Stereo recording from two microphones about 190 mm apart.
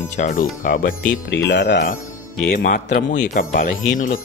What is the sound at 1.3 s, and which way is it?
Speech, 70° left (ahead or behind).